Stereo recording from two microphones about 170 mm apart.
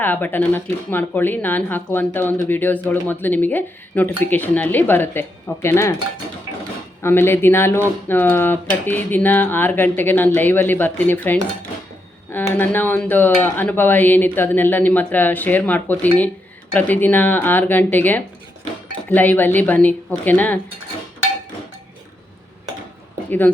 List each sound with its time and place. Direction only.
0.0 s speech: 10° left (ahead or behind)
7.0 s speech: 15° left (ahead or behind)